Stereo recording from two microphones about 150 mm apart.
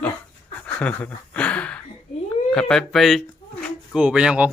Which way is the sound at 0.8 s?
10° left (ahead or behind).